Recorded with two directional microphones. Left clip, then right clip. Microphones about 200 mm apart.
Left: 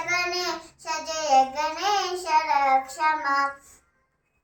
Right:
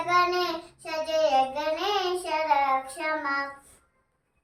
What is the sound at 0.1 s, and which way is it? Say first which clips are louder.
Child singing: right 3 dB; 20° right (ahead or behind).